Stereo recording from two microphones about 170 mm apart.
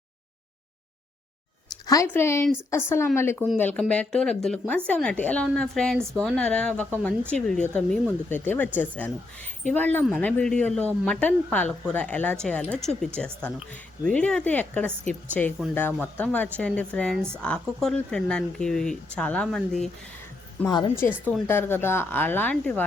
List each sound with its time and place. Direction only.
1.9 s a woman's voice: 15° left (ahead or behind)
3.3 s a woman's voice: centre (ahead or behind)
20.9 s a woman's voice: 15° left (ahead or behind)